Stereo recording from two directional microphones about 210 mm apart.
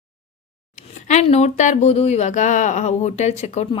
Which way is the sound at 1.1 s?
30° left (ahead or behind).